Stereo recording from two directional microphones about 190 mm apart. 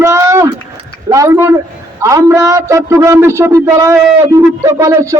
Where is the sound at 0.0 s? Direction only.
15° right (ahead or behind).